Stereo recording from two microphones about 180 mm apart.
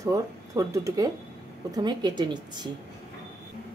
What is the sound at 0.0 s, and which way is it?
A woman's voice, 15° right (ahead or behind).